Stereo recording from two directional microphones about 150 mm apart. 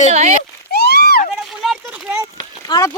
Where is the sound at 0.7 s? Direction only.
90° left.